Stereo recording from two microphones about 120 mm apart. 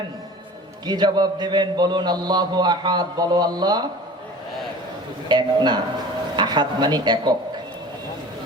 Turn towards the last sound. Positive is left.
turn(degrees=-35)  # may be behind; listen again after turning